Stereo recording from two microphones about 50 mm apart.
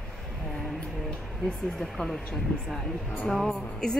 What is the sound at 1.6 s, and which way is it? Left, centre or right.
A woman's voice, centre.